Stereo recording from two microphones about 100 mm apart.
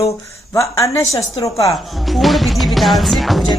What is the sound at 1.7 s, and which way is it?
Speech, centre (ahead or behind).